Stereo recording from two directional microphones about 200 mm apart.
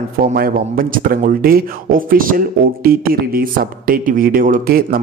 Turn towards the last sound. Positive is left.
turn(degrees=-45)  # may be behind; listen again after turning